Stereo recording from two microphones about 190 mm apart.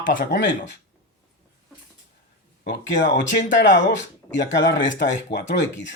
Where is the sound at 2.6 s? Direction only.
70° left (ahead or behind).